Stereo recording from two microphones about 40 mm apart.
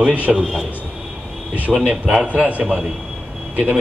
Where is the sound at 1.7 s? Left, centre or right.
Centre.